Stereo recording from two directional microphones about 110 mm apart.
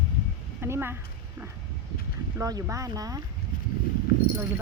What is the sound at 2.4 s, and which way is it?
Speech, 35° right (ahead or behind).